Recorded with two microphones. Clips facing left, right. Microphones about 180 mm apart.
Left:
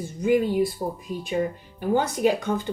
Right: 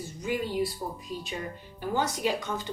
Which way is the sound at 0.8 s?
40° left (ahead or behind).